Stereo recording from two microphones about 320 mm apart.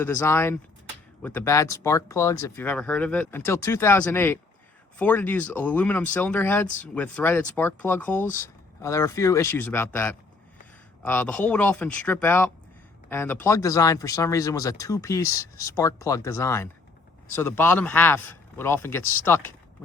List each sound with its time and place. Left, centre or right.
0.0 s speech: centre